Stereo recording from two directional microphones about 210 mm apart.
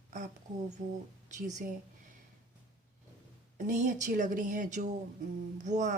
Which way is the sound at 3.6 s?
35° right (ahead or behind).